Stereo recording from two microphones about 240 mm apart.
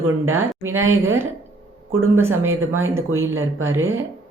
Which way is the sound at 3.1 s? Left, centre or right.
Right.